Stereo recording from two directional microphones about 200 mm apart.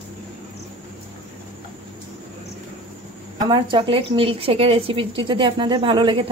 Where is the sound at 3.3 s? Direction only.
20° right (ahead or behind).